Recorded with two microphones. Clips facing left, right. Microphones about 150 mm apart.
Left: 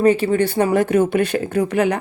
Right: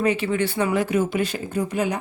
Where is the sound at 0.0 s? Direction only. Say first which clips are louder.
Left 6 dB; 40° left (ahead or behind).